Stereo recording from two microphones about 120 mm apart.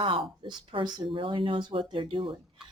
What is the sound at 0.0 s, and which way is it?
Speech, 45° right (ahead or behind).